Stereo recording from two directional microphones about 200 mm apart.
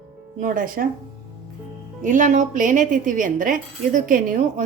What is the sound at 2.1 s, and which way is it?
Speech, 40° right (ahead or behind).